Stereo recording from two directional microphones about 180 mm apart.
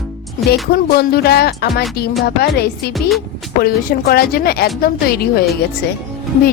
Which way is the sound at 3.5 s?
60° left (ahead or behind).